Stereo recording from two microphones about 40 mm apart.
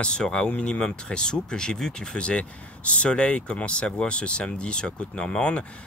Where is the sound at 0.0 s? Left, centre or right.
Left.